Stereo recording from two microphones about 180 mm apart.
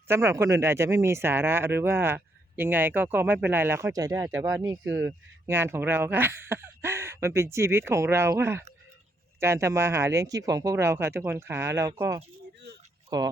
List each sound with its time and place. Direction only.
0.1 s speech: 15° right (ahead or behind)